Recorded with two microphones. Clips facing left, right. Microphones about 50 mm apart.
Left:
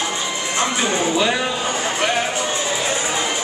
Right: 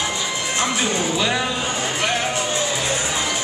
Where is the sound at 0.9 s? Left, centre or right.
Centre.